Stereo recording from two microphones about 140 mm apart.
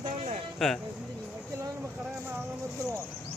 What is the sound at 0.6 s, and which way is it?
Speech, 5° left (ahead or behind).